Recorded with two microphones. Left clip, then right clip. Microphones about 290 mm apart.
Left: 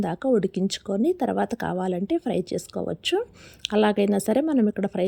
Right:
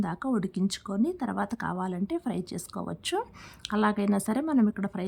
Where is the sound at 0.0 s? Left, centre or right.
Centre.